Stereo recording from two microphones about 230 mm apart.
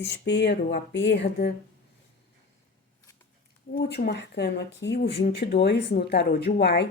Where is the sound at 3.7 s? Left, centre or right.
Left.